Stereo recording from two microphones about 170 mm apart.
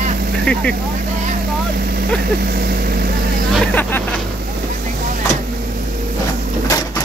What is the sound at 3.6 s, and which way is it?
Speech, 10° left (ahead or behind).